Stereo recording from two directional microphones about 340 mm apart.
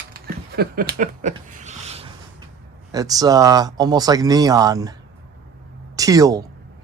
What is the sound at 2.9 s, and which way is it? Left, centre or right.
Speech, centre.